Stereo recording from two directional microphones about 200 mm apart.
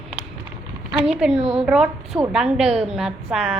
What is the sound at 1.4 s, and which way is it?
Speech, 30° right (ahead or behind).